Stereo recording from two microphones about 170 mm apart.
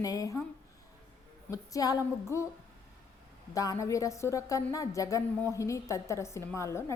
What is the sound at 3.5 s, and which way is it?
A woman's voice, 20° left (ahead or behind).